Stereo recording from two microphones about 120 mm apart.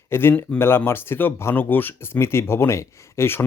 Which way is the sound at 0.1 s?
20° left (ahead or behind).